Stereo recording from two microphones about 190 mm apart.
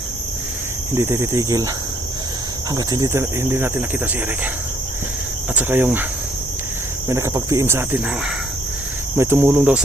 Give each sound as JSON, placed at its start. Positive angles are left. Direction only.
{"t": 0.9, "sound": "cricket", "side_deg": -15}
{"t": 2.7, "sound": "cricket", "side_deg": -20}
{"t": 5.5, "sound": "cricket", "side_deg": -10}
{"t": 7.1, "sound": "cricket", "side_deg": -15}
{"t": 9.1, "sound": "cricket", "side_deg": -10}